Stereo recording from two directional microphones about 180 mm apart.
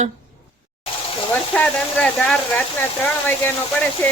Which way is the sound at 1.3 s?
10° left (ahead or behind).